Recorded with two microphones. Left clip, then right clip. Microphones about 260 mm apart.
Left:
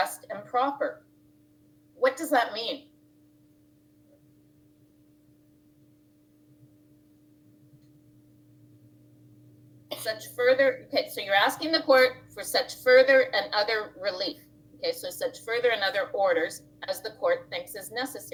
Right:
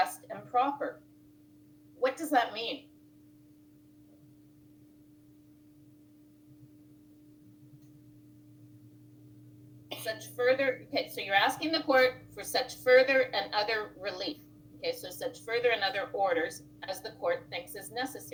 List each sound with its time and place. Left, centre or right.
0.0 s a sound: left
2.0 s a woman's voice: left
9.9 s a woman's voice: left